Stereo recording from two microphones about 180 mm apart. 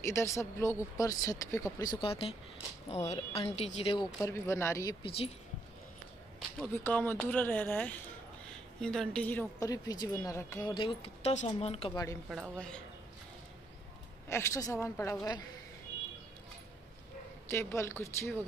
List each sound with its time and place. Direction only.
0.0 s speech: 15° left (ahead or behind)
2.0 s speech: 30° left (ahead or behind)
4.2 s speech: 15° left (ahead or behind)
5.0 s speech: 30° left (ahead or behind)
6.6 s speech: 10° left (ahead or behind)
10.7 s speech: 30° left (ahead or behind)
12.3 s speech: 5° left (ahead or behind)
14.3 s speech: 15° left (ahead or behind)
17.5 s speech: 15° left (ahead or behind)